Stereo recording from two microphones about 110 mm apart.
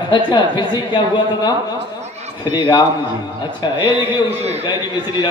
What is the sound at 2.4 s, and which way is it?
Speech, 45° left (ahead or behind).